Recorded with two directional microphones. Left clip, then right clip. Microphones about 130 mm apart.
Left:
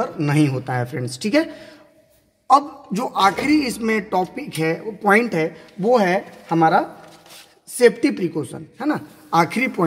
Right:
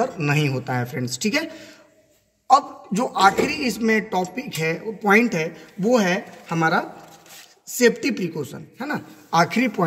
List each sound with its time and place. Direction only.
0.0 s a man's voice: 50° left (ahead or behind); by 1.7 s 65° left (ahead or behind)
2.9 s a man's voice: 35° left (ahead or behind)